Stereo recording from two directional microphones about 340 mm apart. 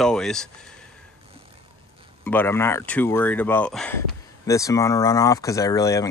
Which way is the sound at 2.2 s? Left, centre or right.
Centre.